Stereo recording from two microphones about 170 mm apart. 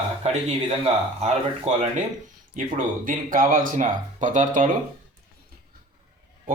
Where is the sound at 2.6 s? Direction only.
50° right (ahead or behind).